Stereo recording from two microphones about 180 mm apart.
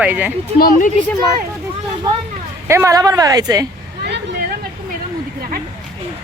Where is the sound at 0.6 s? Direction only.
45° left (ahead or behind).